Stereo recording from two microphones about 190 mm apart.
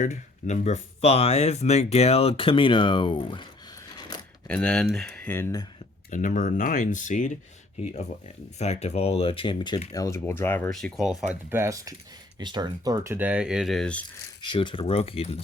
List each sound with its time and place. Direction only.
0.0 s speech: 40° left (ahead or behind)
3.8 s a sound: 20° left (ahead or behind)
4.4 s speech: 5° left (ahead or behind)
6.1 s speech: 40° left (ahead or behind)
8.5 s speech: 35° left (ahead or behind); by 11.1 s centre (ahead or behind)
11.5 s speech: 15° right (ahead or behind); by 14.0 s 5° left (ahead or behind)
14.5 s speech: 25° left (ahead or behind)